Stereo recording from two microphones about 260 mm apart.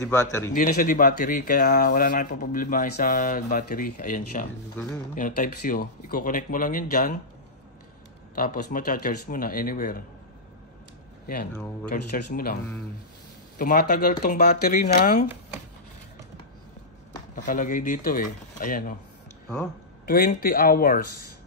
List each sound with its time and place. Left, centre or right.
0.0 s a man's voice: centre
0.6 s speech: left
8.4 s speech: left
11.9 s speech: left
13.6 s speech: left
17.5 s speech: left
20.1 s speech: left